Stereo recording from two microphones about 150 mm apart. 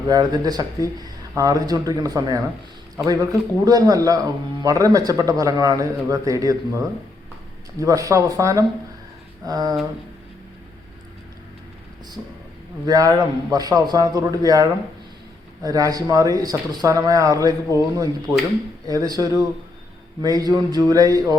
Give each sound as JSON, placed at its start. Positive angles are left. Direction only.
{"t": 0.1, "sound": "speech", "side_deg": -25}
{"t": 12.8, "sound": "speech", "side_deg": -25}